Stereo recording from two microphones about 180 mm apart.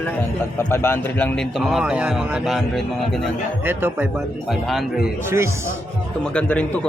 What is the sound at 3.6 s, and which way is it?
Speech, 10° right (ahead or behind).